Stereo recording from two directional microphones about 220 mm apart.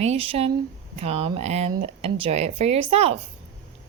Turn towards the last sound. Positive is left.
turn(degrees=-25)  # may be behind; listen again after turning